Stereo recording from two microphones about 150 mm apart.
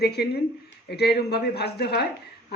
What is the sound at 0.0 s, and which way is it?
Speech, 90° left.